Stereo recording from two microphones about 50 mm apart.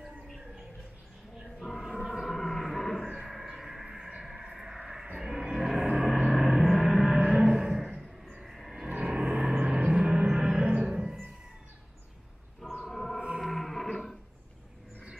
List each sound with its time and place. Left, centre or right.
1.6 s choir: centre
2.1 s a sound: centre
3.4 s a sound: centre
5.6 s music: centre
6.3 s gong: centre
7.2 s music: centre
8.4 s a sound: centre
8.9 s vehicle: centre
9.6 s gong: right
10.9 s music: centre
12.6 s a sound: centre
13.4 s music: centre